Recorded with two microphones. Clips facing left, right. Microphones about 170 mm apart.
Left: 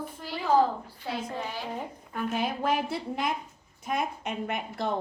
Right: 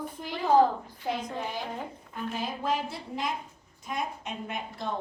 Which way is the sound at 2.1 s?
65° left (ahead or behind).